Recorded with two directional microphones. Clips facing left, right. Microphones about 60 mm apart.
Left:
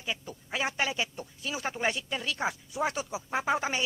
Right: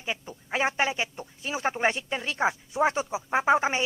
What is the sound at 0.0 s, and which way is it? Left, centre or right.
Speech, right.